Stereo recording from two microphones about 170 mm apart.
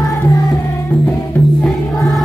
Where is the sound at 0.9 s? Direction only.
5° left (ahead or behind).